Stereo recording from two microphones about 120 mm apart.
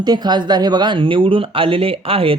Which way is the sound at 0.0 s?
35° right (ahead or behind).